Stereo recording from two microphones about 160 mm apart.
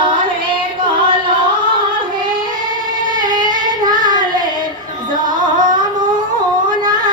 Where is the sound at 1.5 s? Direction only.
60° right (ahead or behind).